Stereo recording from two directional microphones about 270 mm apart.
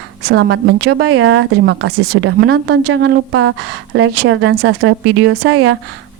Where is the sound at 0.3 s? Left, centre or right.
Right.